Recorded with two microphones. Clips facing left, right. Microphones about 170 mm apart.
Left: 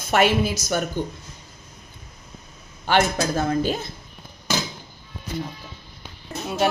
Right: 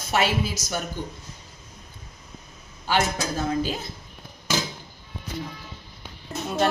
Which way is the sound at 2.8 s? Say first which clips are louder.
Left 4 dB; 60° left (ahead or behind).